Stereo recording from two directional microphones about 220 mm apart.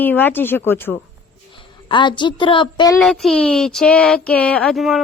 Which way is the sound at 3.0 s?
Centre (ahead or behind).